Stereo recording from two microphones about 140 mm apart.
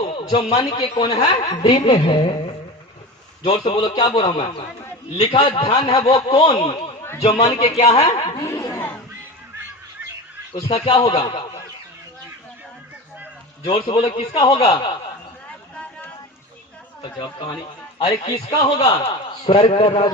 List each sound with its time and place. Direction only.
0.1 s a sound: 35° left (ahead or behind)
0.8 s a woman's voice: 30° left (ahead or behind)
7.0 s a sound: 20° left (ahead or behind)
7.4 s a woman's voice: 30° left (ahead or behind)
7.8 s a woman's voice: 50° left (ahead or behind)
8.4 s speech: 20° left (ahead or behind)
11.1 s a woman's voice: 35° left (ahead or behind)
13.7 s a woman's voice: 35° left (ahead or behind)
14.3 s a woman's voice: 30° left (ahead or behind)
15.7 s vehicle: 10° left (ahead or behind)
17.0 s a woman's voice: 35° left (ahead or behind)